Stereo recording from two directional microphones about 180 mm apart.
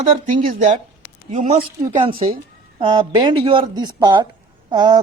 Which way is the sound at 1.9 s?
30° right (ahead or behind).